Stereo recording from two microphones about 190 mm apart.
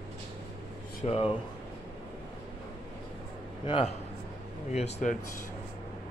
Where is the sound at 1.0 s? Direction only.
30° left (ahead or behind).